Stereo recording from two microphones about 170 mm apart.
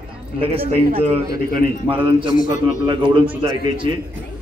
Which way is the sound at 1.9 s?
30° right (ahead or behind).